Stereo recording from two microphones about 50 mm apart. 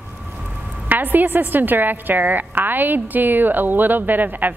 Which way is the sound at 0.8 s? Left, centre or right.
Right.